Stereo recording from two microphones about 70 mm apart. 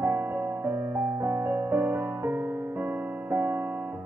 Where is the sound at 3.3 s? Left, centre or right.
Right.